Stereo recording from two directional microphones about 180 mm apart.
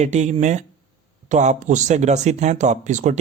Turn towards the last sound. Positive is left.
turn(degrees=-45)  # may be behind; listen again after turning